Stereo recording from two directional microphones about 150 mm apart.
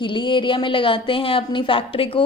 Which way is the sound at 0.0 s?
30° left (ahead or behind).